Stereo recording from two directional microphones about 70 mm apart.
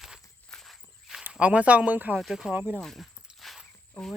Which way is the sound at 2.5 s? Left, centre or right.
Right.